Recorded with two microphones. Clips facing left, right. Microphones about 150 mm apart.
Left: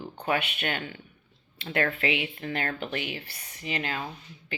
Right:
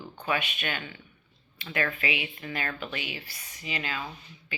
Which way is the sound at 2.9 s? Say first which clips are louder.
Left 4 dB; 55° left (ahead or behind).